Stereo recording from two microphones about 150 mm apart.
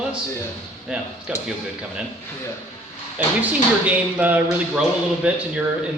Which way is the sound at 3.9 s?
10° right (ahead or behind).